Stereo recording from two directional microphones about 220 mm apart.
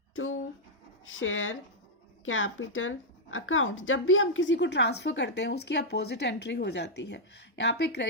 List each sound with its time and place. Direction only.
1.0 s speech: 65° left (ahead or behind)